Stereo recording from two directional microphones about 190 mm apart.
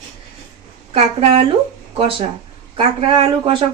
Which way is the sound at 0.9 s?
30° right (ahead or behind).